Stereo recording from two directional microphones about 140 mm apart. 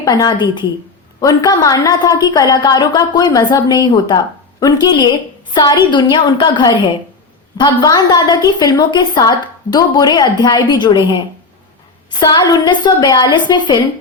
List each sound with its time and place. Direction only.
0.0 s a woman's voice: 25° left (ahead or behind)
12.2 s a woman's voice: 30° left (ahead or behind)